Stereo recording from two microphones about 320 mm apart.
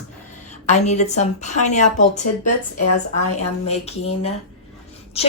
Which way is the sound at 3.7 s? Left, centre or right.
Centre.